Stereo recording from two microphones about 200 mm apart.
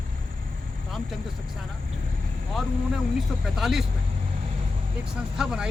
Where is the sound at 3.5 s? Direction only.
Centre (ahead or behind).